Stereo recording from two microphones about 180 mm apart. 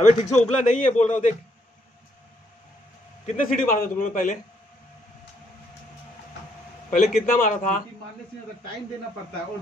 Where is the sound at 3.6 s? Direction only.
50° left (ahead or behind).